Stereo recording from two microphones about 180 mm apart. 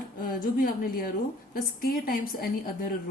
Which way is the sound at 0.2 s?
50° left (ahead or behind).